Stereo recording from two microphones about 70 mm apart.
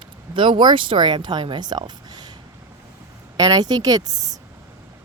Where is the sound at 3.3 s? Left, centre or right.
Right.